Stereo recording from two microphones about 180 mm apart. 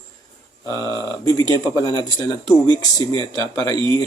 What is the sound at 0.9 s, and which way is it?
Speech, 25° right (ahead or behind).